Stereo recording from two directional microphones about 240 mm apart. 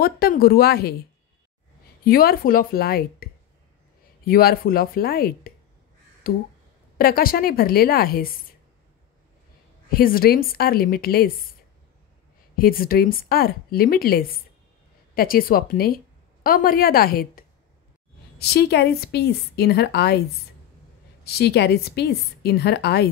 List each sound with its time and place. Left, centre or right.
0.0 s speech: left
2.0 s speech: left
9.9 s speech: left
12.5 s a woman's voice: left
21.2 s a woman's voice: left